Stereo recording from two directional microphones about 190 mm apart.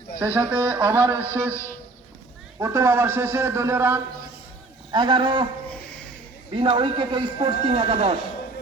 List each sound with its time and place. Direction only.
0.3 s a man's voice: 10° right (ahead or behind)
2.6 s a man's voice: 15° right (ahead or behind)
4.9 s speech: 25° right (ahead or behind)
5.6 s a sound: 5° left (ahead or behind)
6.5 s speech: 30° right (ahead or behind)